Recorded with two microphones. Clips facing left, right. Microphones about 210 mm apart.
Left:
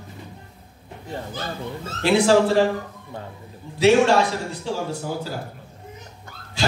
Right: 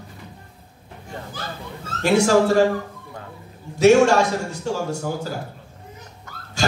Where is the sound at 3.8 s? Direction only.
45° right (ahead or behind).